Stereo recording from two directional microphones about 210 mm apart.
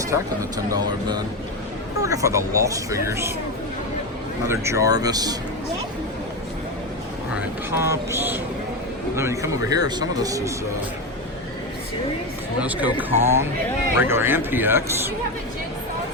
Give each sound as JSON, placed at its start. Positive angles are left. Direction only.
{"t": 0.1, "sound": "speech", "side_deg": -20}
{"t": 4.4, "sound": "speech", "side_deg": -15}
{"t": 7.3, "sound": "speech", "side_deg": -10}
{"t": 12.5, "sound": "speech", "side_deg": -5}